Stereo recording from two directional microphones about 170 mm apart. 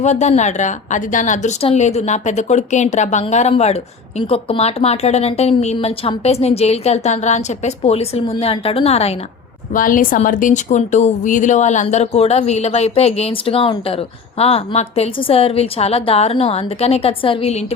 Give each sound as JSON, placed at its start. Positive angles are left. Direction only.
{"t": 0.0, "sound": "a woman's voice", "side_deg": 45}
{"t": 9.7, "sound": "speech", "side_deg": 55}